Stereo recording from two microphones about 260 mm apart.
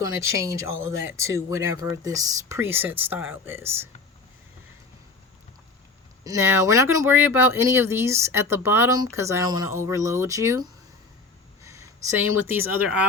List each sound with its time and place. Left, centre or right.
0.4 s speech: centre
0.9 s speech: right
1.3 s speech: centre
6.2 s speech: centre